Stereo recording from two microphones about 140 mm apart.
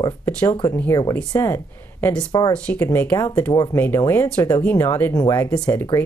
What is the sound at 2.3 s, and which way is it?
Speech, 30° left (ahead or behind).